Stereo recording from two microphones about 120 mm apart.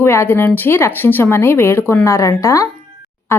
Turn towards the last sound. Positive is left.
turn(degrees=20)  # may be behind; listen again after turning